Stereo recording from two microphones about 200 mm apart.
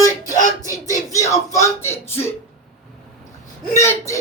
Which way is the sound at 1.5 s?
10° left (ahead or behind).